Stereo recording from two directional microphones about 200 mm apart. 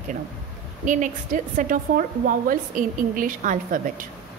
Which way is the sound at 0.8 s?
40° right (ahead or behind).